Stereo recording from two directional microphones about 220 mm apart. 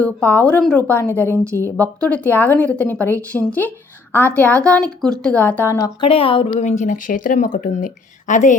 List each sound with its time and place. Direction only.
0.0 s a woman's voice: 5° left (ahead or behind)
6.1 s speech: 25° left (ahead or behind)